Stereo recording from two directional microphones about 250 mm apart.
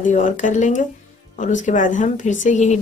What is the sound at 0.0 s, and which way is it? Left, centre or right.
A woman's voice, left.